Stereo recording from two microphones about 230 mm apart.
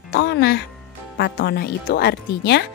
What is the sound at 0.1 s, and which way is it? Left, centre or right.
Speech, left.